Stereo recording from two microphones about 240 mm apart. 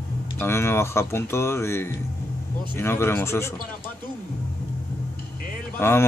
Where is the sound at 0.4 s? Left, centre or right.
Centre.